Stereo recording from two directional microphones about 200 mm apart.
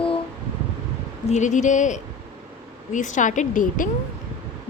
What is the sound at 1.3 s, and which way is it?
Speech, 35° left (ahead or behind).